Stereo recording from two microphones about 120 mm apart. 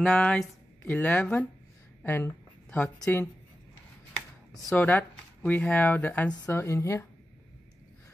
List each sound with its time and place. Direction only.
0.0 s speech: 5° left (ahead or behind)
4.7 s speech: 15° left (ahead or behind)